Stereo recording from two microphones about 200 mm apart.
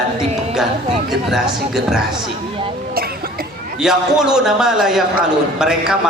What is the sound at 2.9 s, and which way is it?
Cough, 50° right (ahead or behind).